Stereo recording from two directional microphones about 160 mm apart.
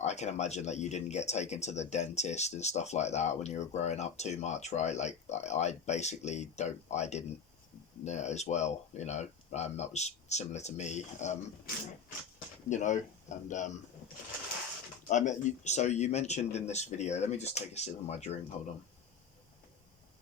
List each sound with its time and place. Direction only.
0.0 s speech: 45° left (ahead or behind)
15.0 s speech: 50° left (ahead or behind)